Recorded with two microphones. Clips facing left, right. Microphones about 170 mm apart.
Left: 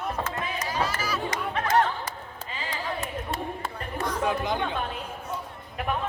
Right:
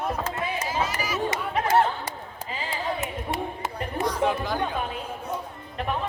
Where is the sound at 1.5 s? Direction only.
30° right (ahead or behind).